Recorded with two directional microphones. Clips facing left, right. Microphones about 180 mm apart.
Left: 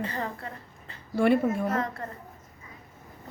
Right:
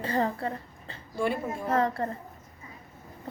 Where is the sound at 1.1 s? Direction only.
65° left (ahead or behind).